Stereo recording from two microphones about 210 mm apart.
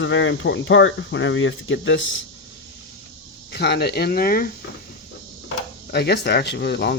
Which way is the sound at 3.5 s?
50° left (ahead or behind).